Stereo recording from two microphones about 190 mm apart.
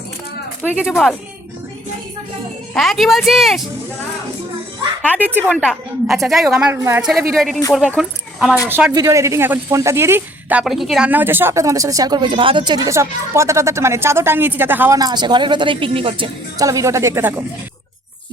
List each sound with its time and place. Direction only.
0.6 s a woman's voice: 5° right (ahead or behind)
2.7 s a woman's voice: centre (ahead or behind)
5.1 s a woman's voice: 10° right (ahead or behind)